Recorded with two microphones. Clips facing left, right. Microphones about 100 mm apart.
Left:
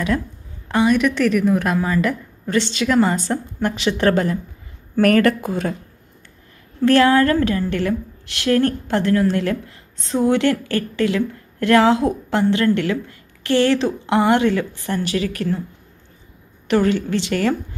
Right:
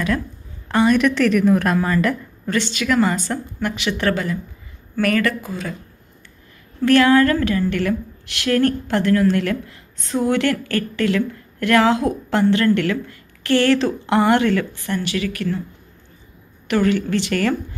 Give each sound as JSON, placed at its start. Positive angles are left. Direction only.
{"t": 0.7, "sound": "a woman's voice", "side_deg": 10}
{"t": 2.5, "sound": "a woman's voice", "side_deg": 25}
{"t": 4.1, "sound": "a woman's voice", "side_deg": 40}
{"t": 6.8, "sound": "a woman's voice", "side_deg": 30}
{"t": 14.8, "sound": "speech", "side_deg": 35}
{"t": 16.6, "sound": "a woman's voice", "side_deg": 30}